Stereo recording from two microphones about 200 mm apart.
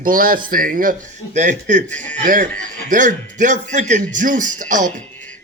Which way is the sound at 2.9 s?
40° right (ahead or behind).